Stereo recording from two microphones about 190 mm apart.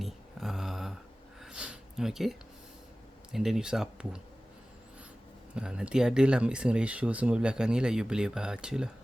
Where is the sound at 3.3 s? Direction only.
Centre (ahead or behind).